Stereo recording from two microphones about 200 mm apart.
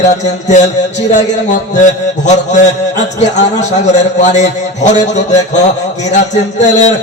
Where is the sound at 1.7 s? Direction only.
35° left (ahead or behind).